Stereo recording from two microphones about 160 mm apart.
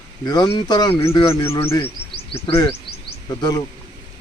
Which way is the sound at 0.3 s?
30° left (ahead or behind).